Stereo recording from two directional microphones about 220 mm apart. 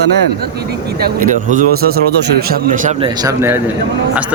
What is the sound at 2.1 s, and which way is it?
Speech, 50° right (ahead or behind).